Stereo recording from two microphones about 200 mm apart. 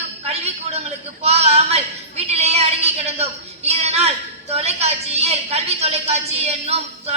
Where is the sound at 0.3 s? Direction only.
30° right (ahead or behind).